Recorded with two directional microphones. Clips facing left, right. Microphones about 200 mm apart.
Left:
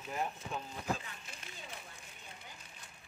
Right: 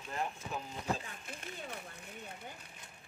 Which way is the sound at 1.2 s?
50° right (ahead or behind).